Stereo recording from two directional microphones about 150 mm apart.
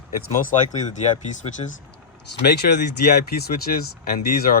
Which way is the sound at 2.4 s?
90° left.